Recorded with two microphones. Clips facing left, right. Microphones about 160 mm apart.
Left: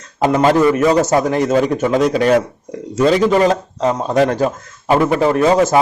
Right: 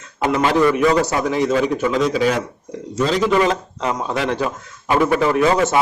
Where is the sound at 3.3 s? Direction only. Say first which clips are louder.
Left 3 dB; 40° left (ahead or behind).